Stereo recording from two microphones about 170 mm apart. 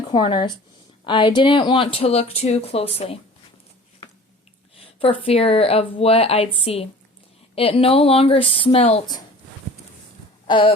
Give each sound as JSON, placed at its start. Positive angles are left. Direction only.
{"t": 0.1, "sound": "speech", "side_deg": 30}
{"t": 4.8, "sound": "speech", "side_deg": 35}
{"t": 10.4, "sound": "a sound", "side_deg": 30}